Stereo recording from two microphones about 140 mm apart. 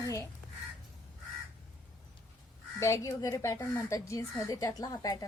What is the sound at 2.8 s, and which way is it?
Speech, 20° left (ahead or behind).